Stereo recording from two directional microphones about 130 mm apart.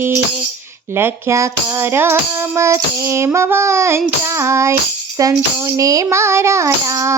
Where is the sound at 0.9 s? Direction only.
15° right (ahead or behind).